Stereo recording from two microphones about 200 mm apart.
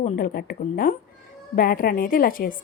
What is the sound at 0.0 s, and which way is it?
A woman's voice, 45° left (ahead or behind).